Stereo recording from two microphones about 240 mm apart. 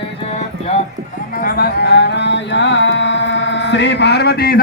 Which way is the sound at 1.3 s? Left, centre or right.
Left.